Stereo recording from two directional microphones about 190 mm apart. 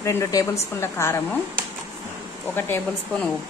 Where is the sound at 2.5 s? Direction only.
10° left (ahead or behind).